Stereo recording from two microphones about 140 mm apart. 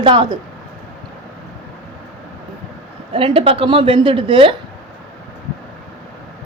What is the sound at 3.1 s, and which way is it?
Speech, 40° right (ahead or behind).